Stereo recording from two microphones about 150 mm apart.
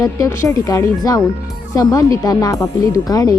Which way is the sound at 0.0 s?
20° left (ahead or behind).